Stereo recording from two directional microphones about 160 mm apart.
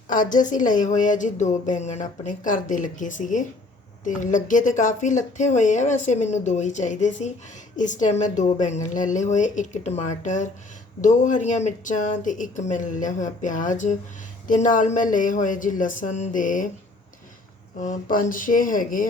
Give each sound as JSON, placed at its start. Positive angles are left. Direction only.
{"t": 0.1, "sound": "speech", "side_deg": 55}
{"t": 17.7, "sound": "speech", "side_deg": 55}